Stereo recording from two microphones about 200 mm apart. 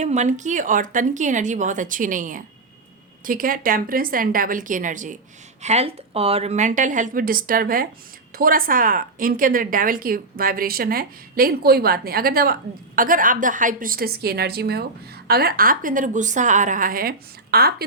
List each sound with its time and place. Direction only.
0.0 s a woman's voice: 35° right (ahead or behind); by 17.8 s 50° right (ahead or behind)